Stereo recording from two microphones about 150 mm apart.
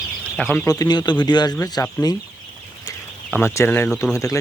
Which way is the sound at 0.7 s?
25° left (ahead or behind).